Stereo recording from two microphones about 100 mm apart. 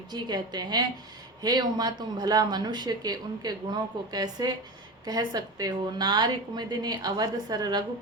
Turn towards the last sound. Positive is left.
turn(degrees=-40)  # may be behind; listen again after turning